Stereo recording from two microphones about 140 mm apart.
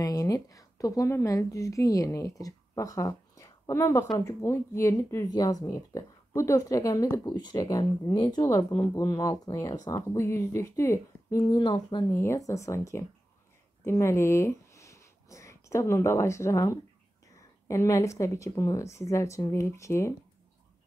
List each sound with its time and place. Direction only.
0.0 s a woman's voice: 25° left (ahead or behind)
12.1 s speech: 20° left (ahead or behind)